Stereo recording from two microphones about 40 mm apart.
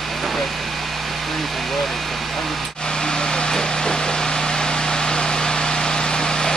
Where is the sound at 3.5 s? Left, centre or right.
Left.